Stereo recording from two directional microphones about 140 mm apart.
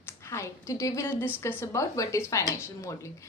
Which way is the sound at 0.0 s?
20° left (ahead or behind).